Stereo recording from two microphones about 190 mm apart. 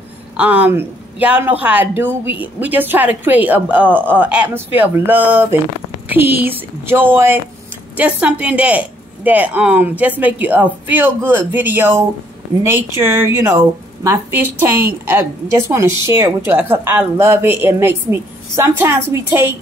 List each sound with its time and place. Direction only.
0.4 s speech: 10° right (ahead or behind)